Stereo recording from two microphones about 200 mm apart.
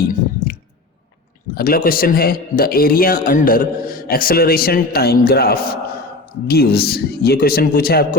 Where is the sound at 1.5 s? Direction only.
45° left (ahead or behind).